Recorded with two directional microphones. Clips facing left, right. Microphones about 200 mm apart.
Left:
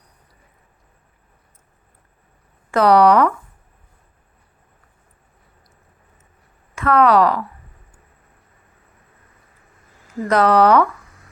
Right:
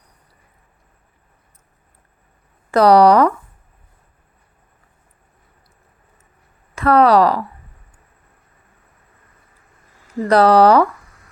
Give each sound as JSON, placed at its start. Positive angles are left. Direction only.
{"t": 2.7, "sound": "speech", "side_deg": -35}
{"t": 6.7, "sound": "speech", "side_deg": -35}
{"t": 10.2, "sound": "speech", "side_deg": -35}